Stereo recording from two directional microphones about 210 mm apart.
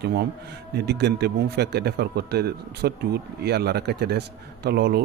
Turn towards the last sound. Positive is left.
turn(degrees=-50)  # may be behind; listen again after turning